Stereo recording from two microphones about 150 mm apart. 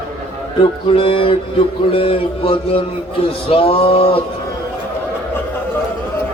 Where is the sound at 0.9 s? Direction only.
35° left (ahead or behind).